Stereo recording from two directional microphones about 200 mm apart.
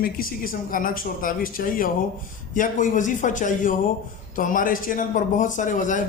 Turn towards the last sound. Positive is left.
turn(degrees=40)  # may be behind; listen again after turning